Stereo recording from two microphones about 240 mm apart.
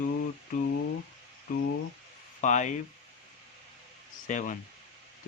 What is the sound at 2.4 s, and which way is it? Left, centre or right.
Speech, left.